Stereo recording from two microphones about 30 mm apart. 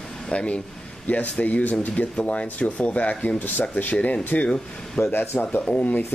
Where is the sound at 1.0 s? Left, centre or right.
Left.